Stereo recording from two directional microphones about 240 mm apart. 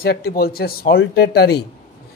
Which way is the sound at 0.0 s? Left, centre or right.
Left.